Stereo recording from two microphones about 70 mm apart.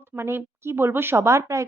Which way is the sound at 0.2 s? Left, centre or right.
Right.